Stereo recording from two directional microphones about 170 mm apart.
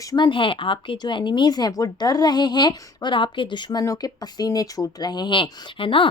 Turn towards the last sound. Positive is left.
turn(degrees=30)  # may be behind; listen again after turning